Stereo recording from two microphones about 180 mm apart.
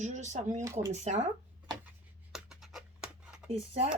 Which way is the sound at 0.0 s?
40° right (ahead or behind).